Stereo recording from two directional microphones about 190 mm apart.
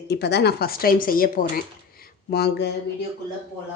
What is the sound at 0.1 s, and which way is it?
Speech, 60° left (ahead or behind).